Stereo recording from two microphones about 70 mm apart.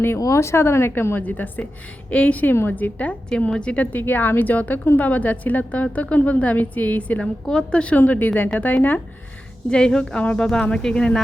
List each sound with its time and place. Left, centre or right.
0.2 s a woman's voice: left
9.6 s a woman's voice: centre